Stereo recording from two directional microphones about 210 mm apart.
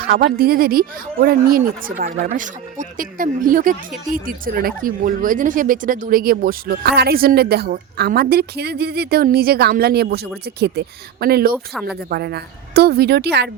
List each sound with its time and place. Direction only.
0.0 s speech: 45° right (ahead or behind)
11.5 s speech: 5° right (ahead or behind)
12.0 s speech: 50° right (ahead or behind)